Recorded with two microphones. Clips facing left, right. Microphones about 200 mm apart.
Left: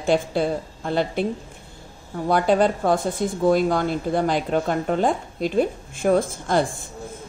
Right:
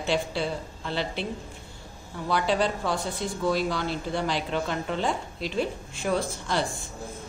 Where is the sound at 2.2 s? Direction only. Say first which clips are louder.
Left 7 dB; 50° left (ahead or behind).